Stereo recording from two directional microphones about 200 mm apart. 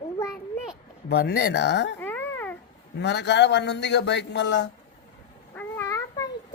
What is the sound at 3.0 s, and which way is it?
Speech, 60° left (ahead or behind).